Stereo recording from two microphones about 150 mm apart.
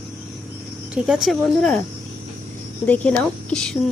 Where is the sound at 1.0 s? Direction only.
Centre (ahead or behind).